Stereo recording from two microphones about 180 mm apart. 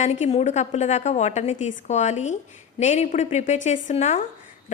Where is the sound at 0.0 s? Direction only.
40° left (ahead or behind).